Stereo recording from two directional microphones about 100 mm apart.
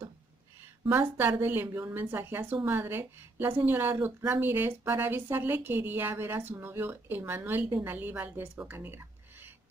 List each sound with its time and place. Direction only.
0.9 s a woman's voice: 20° right (ahead or behind)